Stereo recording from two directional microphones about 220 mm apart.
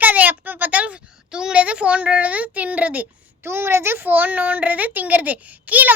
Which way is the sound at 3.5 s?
10° right (ahead or behind).